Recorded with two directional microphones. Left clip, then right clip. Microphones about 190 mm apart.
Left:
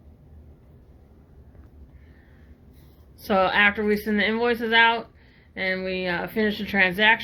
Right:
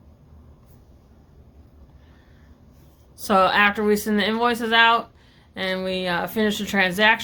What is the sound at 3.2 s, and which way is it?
Speech, 50° right (ahead or behind).